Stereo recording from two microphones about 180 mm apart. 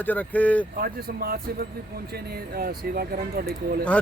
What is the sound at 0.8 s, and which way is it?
Speech, 55° right (ahead or behind).